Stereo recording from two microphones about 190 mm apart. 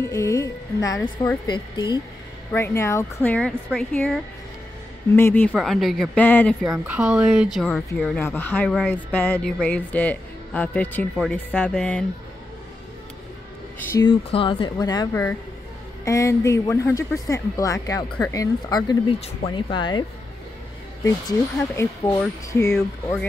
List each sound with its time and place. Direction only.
0.0 s music: 15° left (ahead or behind)
1.5 s speech: 20° left (ahead or behind)
5.5 s speech: centre (ahead or behind)
6.9 s speech: 5° right (ahead or behind)
14.0 s speech: 25° left (ahead or behind)
19.1 s speech: 30° left (ahead or behind); by 23.1 s 15° left (ahead or behind)